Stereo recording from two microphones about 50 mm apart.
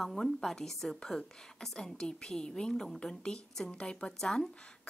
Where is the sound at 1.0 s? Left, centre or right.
Centre.